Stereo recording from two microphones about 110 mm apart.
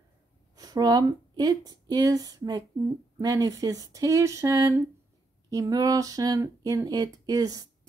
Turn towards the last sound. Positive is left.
turn(degrees=-35)  # may be behind; listen again after turning